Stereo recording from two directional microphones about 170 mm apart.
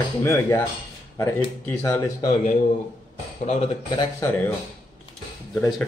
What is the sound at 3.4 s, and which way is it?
Speech, 40° left (ahead or behind).